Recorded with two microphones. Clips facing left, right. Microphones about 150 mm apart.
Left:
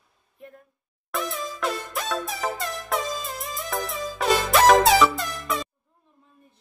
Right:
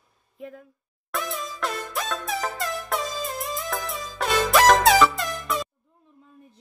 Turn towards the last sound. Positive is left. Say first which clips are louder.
# even
turn(degrees=0)  # may be behind; listen again after turning